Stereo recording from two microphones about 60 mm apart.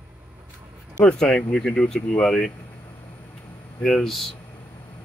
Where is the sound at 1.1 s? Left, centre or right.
Centre.